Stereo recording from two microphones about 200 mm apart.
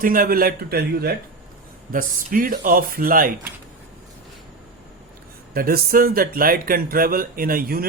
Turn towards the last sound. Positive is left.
turn(degrees=-45)  # may be behind; listen again after turning